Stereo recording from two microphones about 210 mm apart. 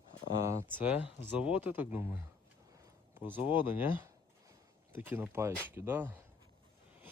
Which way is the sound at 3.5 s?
10° right (ahead or behind).